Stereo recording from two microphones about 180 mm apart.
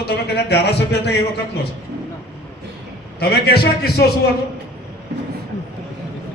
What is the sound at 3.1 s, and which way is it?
Speech, 65° left (ahead or behind).